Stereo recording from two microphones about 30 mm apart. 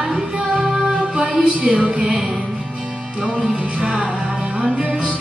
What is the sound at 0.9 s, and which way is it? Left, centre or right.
Music, right.